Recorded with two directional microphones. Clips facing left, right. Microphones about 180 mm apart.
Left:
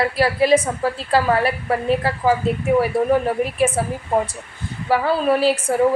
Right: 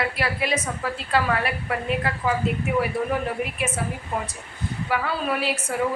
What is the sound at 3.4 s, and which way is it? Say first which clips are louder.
Speech: left 8 dB; 35° left (ahead or behind).